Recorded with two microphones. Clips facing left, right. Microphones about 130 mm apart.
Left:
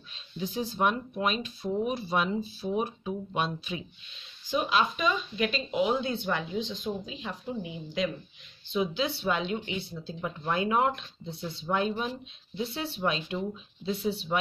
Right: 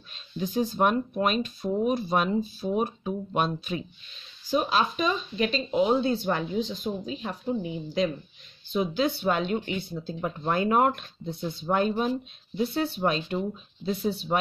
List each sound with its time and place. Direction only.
0.1 s speech: 45° right (ahead or behind)